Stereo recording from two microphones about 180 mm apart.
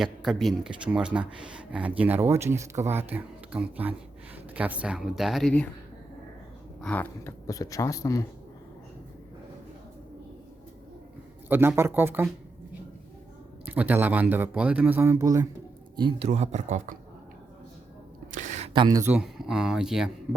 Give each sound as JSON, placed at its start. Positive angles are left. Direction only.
{"t": 0.0, "sound": "a man's voice", "side_deg": 0}
{"t": 6.8, "sound": "speech", "side_deg": 10}
{"t": 11.4, "sound": "a man's voice", "side_deg": -10}
{"t": 13.7, "sound": "a man's voice", "side_deg": -10}
{"t": 16.0, "sound": "speech", "side_deg": -30}
{"t": 18.3, "sound": "a sound", "side_deg": -45}
{"t": 18.7, "sound": "speech", "side_deg": -25}
{"t": 19.0, "sound": "speech", "side_deg": -5}